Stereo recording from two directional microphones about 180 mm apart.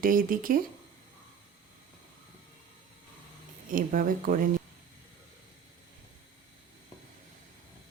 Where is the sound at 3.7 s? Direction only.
50° right (ahead or behind).